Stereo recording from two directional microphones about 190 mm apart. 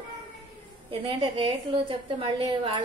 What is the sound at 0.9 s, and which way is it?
A woman's voice, 25° right (ahead or behind).